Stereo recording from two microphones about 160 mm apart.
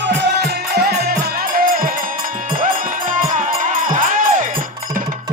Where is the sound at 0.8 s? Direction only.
75° right (ahead or behind).